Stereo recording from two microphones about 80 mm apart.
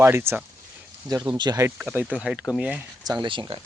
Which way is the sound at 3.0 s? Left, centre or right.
Right.